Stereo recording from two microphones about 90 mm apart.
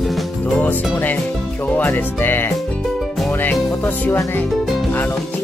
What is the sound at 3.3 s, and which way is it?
Music, 20° left (ahead or behind).